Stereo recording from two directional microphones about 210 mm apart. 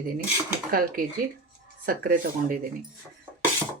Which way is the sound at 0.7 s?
45° right (ahead or behind).